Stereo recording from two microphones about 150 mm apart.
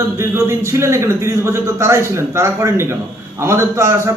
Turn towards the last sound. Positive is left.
turn(degrees=-20)  # may be behind; listen again after turning